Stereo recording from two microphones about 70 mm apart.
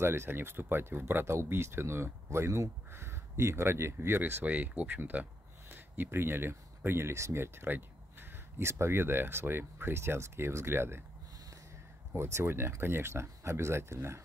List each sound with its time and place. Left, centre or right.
0.0 s speech: right
12.1 s speech: right